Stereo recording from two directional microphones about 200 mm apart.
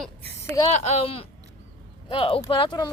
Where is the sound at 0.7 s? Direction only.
35° left (ahead or behind).